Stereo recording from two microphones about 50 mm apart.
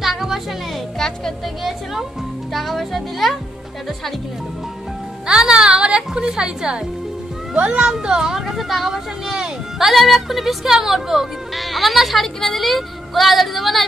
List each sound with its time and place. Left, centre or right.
0.0 s music: centre
0.9 s speech: centre
1.6 s music: centre
2.5 s speech: centre
5.2 s speech: centre
5.7 s a sound: right
7.5 s a child's voice: right
7.8 s speech: centre